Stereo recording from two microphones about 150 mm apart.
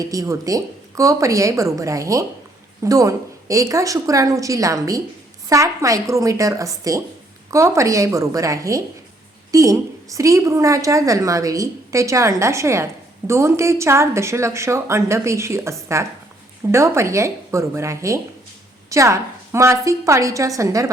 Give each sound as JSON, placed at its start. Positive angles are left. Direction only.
{"t": 0.0, "sound": "a woman's voice", "side_deg": -20}